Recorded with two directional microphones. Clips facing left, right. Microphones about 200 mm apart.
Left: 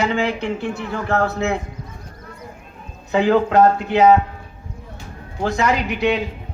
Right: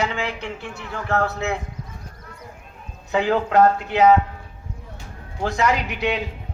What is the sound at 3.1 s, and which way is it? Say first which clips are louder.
Speech: left 4 dB; 5° right (ahead or behind).